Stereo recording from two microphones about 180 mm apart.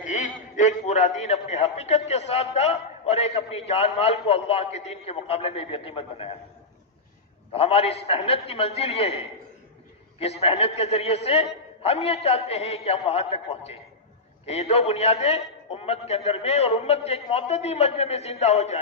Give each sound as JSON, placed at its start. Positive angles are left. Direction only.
{"t": 0.1, "sound": "a man's voice", "side_deg": 40}
{"t": 7.5, "sound": "a man's voice", "side_deg": 30}